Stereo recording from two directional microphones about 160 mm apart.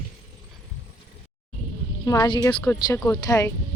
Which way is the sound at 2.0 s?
20° left (ahead or behind).